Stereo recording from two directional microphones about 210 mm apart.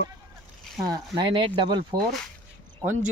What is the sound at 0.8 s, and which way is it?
Speech, 20° right (ahead or behind).